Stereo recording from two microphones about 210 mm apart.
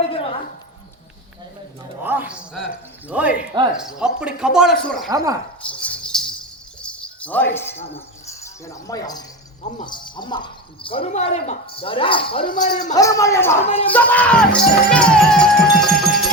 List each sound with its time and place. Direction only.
0.1 s a sound: 25° left (ahead or behind)
2.0 s speech: 10° right (ahead or behind)
5.1 s speech: 15° right (ahead or behind)
5.6 s a sound: 5° left (ahead or behind)
6.8 s jingle bell: 5° left (ahead or behind)
8.3 s speech: 15° left (ahead or behind)